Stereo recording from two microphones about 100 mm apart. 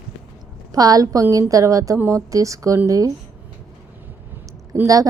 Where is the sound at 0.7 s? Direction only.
40° right (ahead or behind).